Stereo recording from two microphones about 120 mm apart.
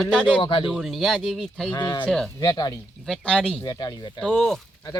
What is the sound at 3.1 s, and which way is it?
Speech, 5° left (ahead or behind).